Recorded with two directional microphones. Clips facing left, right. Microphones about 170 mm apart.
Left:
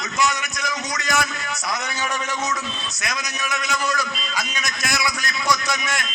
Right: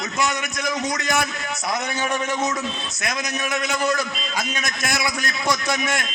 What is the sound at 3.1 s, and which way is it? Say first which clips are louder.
A man's voice: right 3 dB; 55° right (ahead or behind).